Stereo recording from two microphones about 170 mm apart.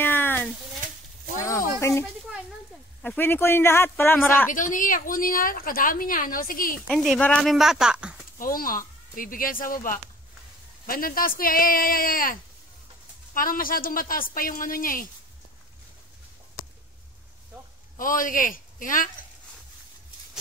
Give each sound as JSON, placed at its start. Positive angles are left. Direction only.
{"t": 0.0, "sound": "a sound", "side_deg": 10}
{"t": 1.8, "sound": "snake", "side_deg": 15}
{"t": 3.0, "sound": "speech", "side_deg": 10}
{"t": 4.5, "sound": "a woman's voice", "side_deg": 50}
{"t": 6.9, "sound": "speech", "side_deg": 0}
{"t": 8.4, "sound": "a woman's voice", "side_deg": 55}
{"t": 17.9, "sound": "a man's voice", "side_deg": 55}